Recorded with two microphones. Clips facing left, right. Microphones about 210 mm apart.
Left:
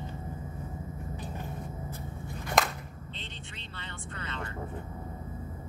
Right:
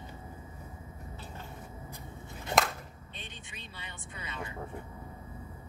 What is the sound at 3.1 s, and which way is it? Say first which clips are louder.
Vehicle: left 4 dB; 10° right (ahead or behind).